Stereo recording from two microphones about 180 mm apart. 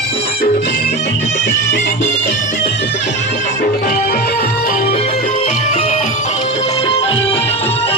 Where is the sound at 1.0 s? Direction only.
70° left (ahead or behind).